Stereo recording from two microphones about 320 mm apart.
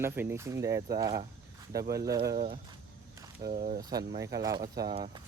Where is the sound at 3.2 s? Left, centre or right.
Centre.